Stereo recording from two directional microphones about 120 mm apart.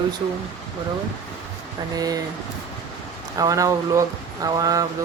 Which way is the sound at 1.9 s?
30° right (ahead or behind).